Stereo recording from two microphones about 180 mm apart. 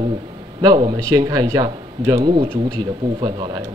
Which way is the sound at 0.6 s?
25° right (ahead or behind).